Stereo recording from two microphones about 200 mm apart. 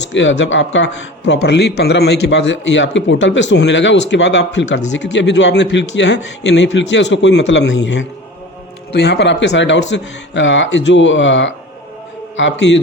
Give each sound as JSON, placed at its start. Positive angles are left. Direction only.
{"t": 0.1, "sound": "a man's voice", "side_deg": 65}